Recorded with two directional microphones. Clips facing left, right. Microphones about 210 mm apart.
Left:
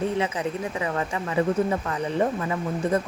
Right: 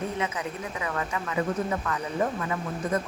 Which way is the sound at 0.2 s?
30° left (ahead or behind).